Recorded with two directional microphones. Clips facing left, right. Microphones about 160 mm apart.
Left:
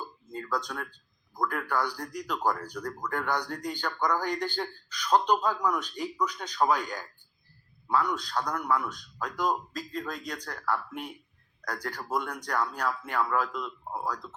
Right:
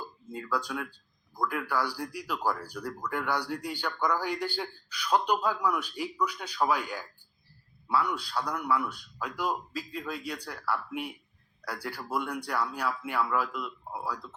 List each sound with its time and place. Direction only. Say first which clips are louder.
0.0 s speech: left 1 dB; 10° right (ahead or behind)
8.0 s speech: left 1 dB; 10° right (ahead or behind)